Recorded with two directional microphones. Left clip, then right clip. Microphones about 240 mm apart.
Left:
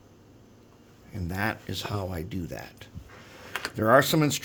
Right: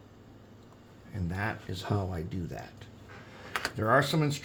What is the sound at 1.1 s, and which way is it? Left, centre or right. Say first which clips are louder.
Speech: left 5 dB; left.